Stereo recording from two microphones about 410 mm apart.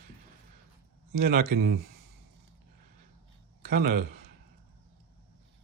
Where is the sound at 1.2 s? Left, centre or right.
Right.